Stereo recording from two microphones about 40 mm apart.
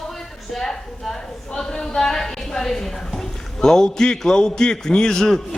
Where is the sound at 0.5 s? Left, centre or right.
Centre.